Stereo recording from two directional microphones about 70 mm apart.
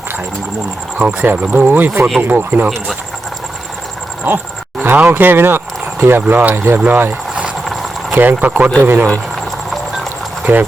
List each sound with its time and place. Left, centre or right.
0.9 s speech: right
4.3 s speech: right
10.4 s speech: right